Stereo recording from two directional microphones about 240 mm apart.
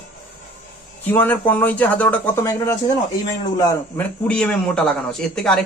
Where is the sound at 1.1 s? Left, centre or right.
Centre.